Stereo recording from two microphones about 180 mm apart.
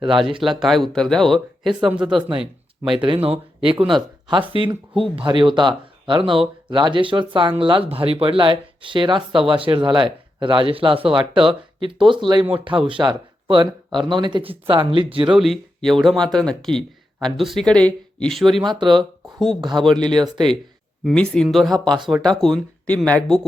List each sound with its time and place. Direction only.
0.6 s speech: centre (ahead or behind)
2.0 s speech: 30° right (ahead or behind)
15.4 s speech: centre (ahead or behind)
18.6 s speech: 25° right (ahead or behind)
19.8 s speech: centre (ahead or behind)
20.1 s speech: 25° right (ahead or behind)
21.0 s speech: centre (ahead or behind)